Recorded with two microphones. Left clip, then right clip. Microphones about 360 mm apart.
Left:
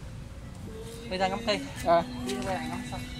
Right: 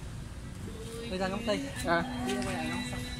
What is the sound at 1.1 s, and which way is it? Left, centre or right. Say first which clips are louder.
Speech: left 5 dB; left.